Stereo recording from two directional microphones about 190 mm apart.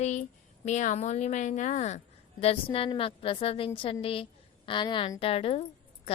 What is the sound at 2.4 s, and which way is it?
A woman's voice, 30° left (ahead or behind).